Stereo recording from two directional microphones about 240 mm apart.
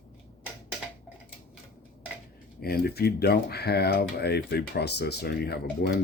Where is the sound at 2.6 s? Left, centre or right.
Left.